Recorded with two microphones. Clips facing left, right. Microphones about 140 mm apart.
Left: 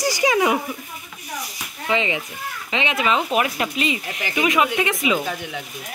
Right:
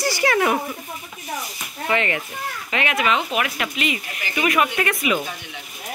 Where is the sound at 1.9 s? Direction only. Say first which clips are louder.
Even; 15° left (ahead or behind).